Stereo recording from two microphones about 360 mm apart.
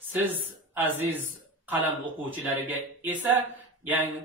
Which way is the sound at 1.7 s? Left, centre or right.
Centre.